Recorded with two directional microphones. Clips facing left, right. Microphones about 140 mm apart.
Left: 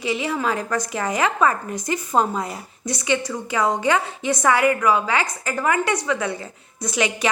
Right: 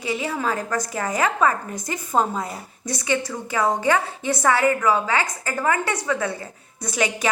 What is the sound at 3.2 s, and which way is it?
A woman's voice, 20° left (ahead or behind).